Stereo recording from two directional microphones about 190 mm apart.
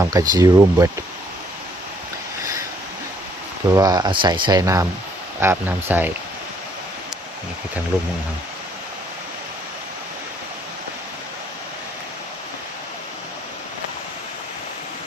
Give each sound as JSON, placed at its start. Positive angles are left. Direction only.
{"t": 0.1, "sound": "speech", "side_deg": -15}
{"t": 3.7, "sound": "speech", "side_deg": -20}
{"t": 7.9, "sound": "speech", "side_deg": -10}